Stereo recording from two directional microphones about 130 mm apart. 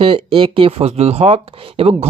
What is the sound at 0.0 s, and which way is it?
Speech, 45° right (ahead or behind).